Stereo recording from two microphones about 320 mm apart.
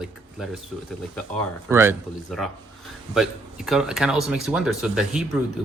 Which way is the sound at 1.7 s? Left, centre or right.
Centre.